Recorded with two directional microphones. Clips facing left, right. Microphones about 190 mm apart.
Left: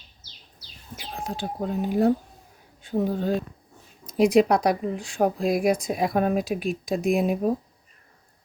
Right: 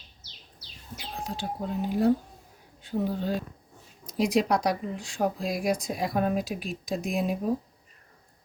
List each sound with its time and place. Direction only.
1.2 s speech: 50° left (ahead or behind)